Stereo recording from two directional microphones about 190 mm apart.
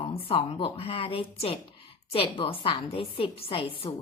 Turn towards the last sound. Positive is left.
turn(degrees=30)  # may be behind; listen again after turning